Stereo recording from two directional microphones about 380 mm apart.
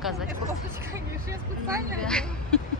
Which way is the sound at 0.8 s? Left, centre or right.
Centre.